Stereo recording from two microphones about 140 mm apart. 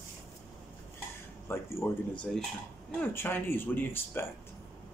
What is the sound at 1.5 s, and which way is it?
Speech, 15° left (ahead or behind).